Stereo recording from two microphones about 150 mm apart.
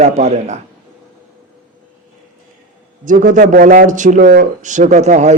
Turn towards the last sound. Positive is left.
turn(degrees=-50)  # may be behind; listen again after turning